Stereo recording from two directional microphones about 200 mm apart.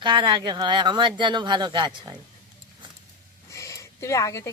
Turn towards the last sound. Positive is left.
turn(degrees=15)  # may be behind; listen again after turning